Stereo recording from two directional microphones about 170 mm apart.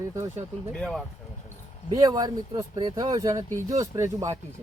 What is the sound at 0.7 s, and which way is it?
Speech, 5° left (ahead or behind).